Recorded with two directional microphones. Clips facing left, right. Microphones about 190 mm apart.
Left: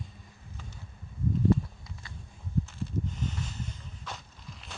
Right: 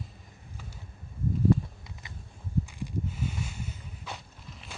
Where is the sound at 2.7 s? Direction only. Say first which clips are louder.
Even; 10° right (ahead or behind).